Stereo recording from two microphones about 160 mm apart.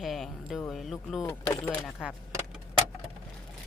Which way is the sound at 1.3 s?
10° left (ahead or behind).